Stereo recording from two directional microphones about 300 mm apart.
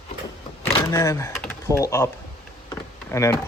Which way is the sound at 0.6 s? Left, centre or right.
Centre.